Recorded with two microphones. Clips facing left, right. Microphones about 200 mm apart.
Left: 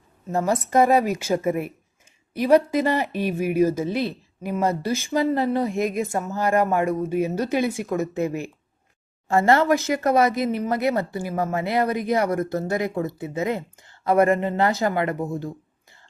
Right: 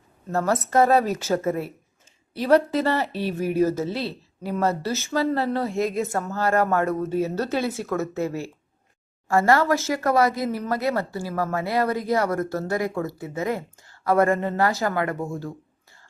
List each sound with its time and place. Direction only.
0.3 s speech: 15° left (ahead or behind)